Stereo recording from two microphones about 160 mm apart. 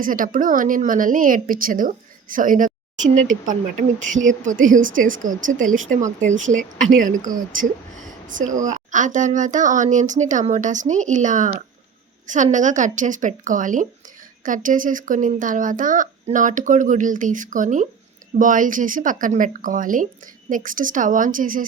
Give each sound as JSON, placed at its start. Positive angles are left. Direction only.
{"t": 0.0, "sound": "a woman's voice", "side_deg": -60}